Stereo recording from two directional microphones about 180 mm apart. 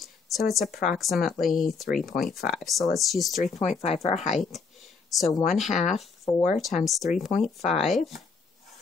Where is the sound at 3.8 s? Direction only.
35° left (ahead or behind).